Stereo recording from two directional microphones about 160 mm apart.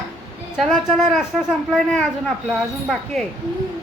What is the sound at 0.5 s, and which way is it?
Speech, 5° right (ahead or behind).